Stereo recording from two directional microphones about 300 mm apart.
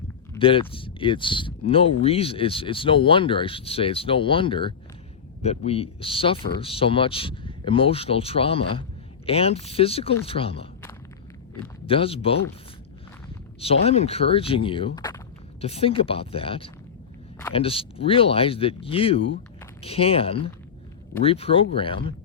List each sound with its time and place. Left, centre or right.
0.3 s speech: centre
11.9 s speech: centre
13.8 s speech: left